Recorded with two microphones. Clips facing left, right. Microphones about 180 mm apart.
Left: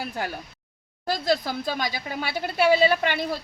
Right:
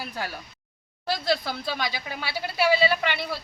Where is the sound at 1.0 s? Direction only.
45° left (ahead or behind).